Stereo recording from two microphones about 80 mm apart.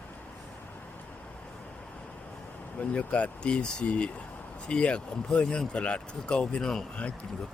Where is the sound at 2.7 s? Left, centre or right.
Centre.